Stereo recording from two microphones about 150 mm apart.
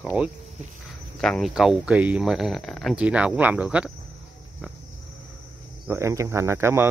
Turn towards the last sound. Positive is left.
turn(degrees=-15)  # may be behind; listen again after turning